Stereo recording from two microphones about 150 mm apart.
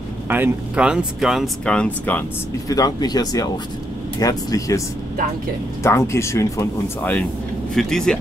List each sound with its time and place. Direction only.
0.3 s speech: 10° right (ahead or behind); by 2.2 s 10° left (ahead or behind)
2.7 s speech: 25° left (ahead or behind); by 8.2 s 5° left (ahead or behind)